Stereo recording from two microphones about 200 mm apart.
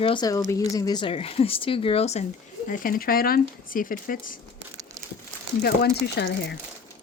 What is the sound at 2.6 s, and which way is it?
Speech, 45° left (ahead or behind).